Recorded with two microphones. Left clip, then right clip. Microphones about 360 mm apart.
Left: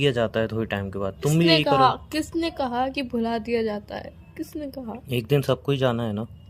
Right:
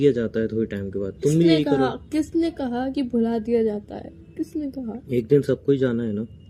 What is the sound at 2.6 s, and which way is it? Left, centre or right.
A woman's voice, left.